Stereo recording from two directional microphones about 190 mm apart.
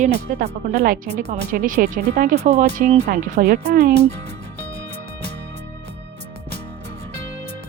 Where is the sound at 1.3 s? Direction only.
45° right (ahead or behind).